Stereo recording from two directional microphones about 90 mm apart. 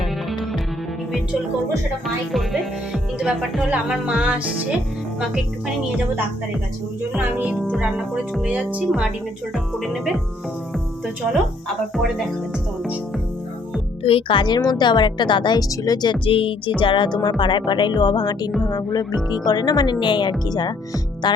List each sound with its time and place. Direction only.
2.0 s speech: centre (ahead or behind)
7.5 s speech: 5° left (ahead or behind)
7.8 s speech: 10° right (ahead or behind)
9.7 s speech: centre (ahead or behind)
14.0 s speech: 80° left; by 15.6 s 60° left (ahead or behind)
15.7 s speech: 45° left (ahead or behind)
16.2 s speech: 80° left
16.8 s speech: 65° left (ahead or behind)